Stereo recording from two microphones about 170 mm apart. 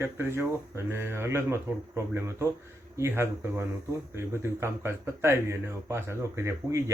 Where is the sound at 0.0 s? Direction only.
15° right (ahead or behind).